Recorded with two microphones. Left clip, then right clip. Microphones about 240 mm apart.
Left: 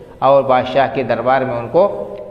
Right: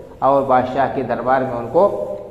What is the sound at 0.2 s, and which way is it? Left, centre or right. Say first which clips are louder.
A man's voice: left 3 dB; left.